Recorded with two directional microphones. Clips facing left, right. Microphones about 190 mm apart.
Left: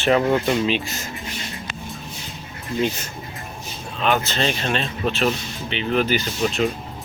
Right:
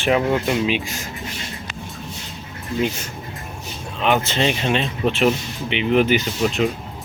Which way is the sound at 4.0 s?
20° right (ahead or behind).